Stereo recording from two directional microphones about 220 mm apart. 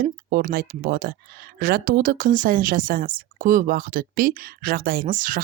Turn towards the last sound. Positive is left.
turn(degrees=-35)  # may be behind; listen again after turning